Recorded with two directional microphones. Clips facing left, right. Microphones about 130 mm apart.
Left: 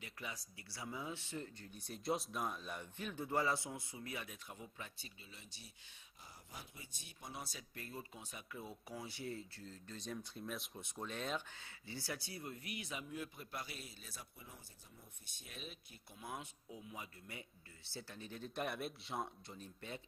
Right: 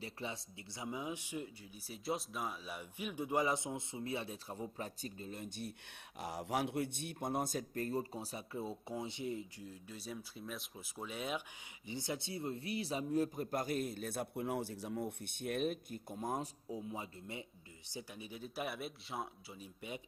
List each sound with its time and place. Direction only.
0.0 s speech: 30° right (ahead or behind); by 5.7 s 50° right (ahead or behind)
6.1 s speech: 80° right; by 11.4 s 10° right (ahead or behind)
11.9 s speech: 20° right (ahead or behind)